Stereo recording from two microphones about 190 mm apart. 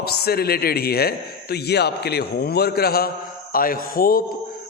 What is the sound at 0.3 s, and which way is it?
A man's voice, 55° left (ahead or behind).